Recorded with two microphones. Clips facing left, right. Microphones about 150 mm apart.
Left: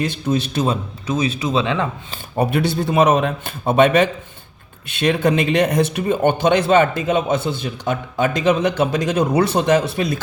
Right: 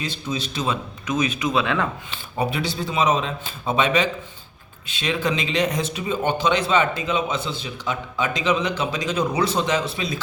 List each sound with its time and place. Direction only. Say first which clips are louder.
0.0 s speech: left 8 dB; 55° left (ahead or behind)
1.0 s speech: left 2 dB; 30° left (ahead or behind)
2.4 s a man's voice: left 6 dB; 55° left (ahead or behind)